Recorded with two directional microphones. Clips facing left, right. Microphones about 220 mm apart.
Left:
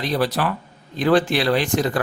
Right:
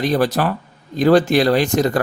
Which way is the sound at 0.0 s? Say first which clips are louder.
Right 4 dB; 45° right (ahead or behind).